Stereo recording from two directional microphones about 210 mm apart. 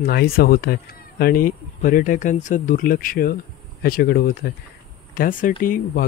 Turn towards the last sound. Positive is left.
turn(degrees=45)  # may be behind; listen again after turning